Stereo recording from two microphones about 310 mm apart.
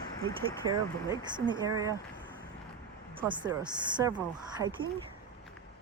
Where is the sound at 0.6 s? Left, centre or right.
Right.